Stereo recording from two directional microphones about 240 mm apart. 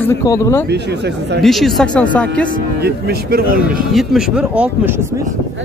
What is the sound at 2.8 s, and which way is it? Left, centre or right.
Speech, right.